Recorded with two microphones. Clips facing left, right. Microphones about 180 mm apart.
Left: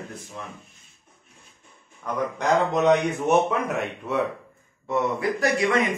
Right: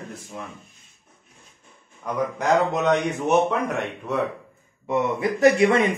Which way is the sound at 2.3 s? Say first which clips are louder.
Even; centre (ahead or behind).